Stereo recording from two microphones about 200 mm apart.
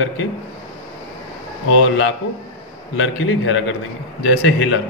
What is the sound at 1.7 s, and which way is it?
A man's voice, 75° left (ahead or behind).